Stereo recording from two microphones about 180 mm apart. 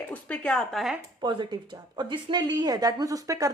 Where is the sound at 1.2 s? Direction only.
25° right (ahead or behind).